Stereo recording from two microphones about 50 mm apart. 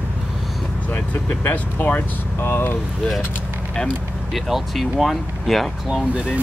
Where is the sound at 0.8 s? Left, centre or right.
Left.